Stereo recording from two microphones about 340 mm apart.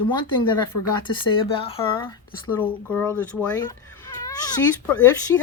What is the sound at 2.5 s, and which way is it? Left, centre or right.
Speech, centre.